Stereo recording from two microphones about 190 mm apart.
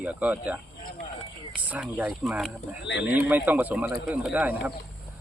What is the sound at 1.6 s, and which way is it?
Speech, 5° right (ahead or behind).